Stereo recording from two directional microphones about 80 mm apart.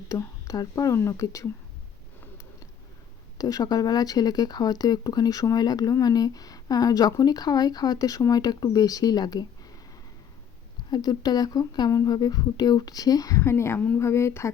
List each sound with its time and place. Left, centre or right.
0.1 s speech: left
0.9 s speech: left
3.3 s speech: left
10.9 s speech: left
13.4 s speech: left